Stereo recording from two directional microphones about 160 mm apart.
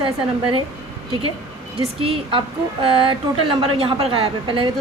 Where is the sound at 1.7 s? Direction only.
35° right (ahead or behind).